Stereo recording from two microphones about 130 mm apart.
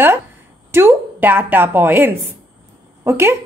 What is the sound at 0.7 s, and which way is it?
Speech, 20° right (ahead or behind).